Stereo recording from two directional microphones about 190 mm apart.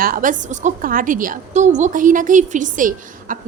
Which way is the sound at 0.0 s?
45° right (ahead or behind).